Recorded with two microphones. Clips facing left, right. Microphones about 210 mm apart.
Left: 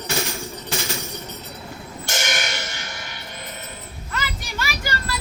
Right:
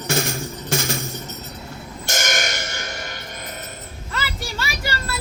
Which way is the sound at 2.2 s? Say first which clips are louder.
Right 2 dB; 45° right (ahead or behind).